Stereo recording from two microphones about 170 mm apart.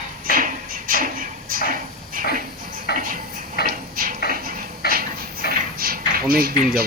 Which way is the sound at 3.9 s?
55° right (ahead or behind).